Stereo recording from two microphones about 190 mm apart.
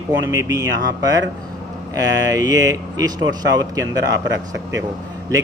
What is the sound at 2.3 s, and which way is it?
Speech, 20° right (ahead or behind).